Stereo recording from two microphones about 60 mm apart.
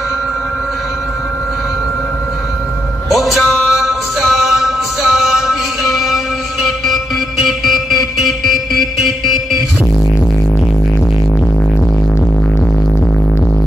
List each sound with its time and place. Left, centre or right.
3.1 s music: centre